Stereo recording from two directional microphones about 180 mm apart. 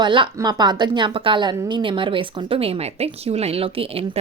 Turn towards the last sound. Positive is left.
turn(degrees=-30)  # may be behind; listen again after turning